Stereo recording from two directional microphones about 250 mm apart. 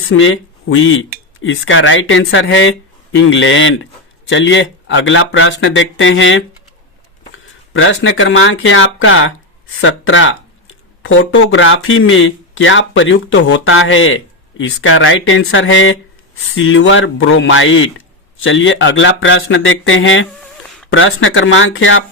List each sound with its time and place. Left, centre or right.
0.1 s speech: left
7.7 s speech: left